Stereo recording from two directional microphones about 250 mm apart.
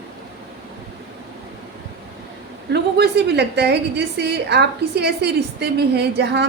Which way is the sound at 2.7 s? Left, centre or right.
Right.